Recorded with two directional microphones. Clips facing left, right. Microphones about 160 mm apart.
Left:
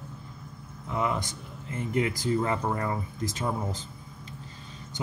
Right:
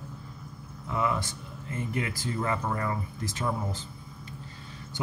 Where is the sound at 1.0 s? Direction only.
20° left (ahead or behind).